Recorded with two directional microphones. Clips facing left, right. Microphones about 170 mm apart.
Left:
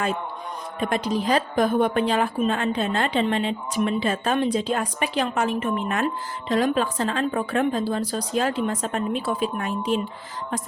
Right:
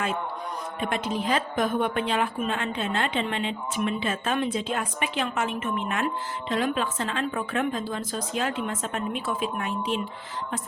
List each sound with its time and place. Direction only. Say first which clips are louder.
0.8 s a woman's voice: left 5 dB; 40° left (ahead or behind)